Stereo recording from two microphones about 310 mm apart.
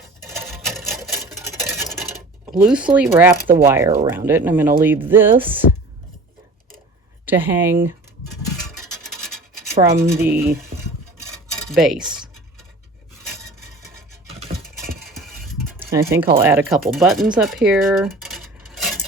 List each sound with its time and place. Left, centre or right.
0.2 s sewing machine: centre
2.5 s speech: centre
7.3 s speech: centre
8.6 s a sound: centre
10.3 s speech: centre
11.3 s cutlery: centre
14.3 s a sound: centre
15.1 s a sound: centre
16.1 s speech: centre